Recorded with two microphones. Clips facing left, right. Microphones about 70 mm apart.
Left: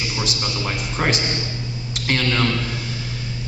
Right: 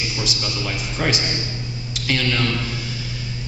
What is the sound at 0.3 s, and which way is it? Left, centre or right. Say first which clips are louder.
A man's voice: left 1 dB; left.